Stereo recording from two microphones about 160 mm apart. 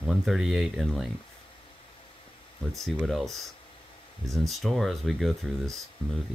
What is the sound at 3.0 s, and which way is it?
Speech, centre (ahead or behind).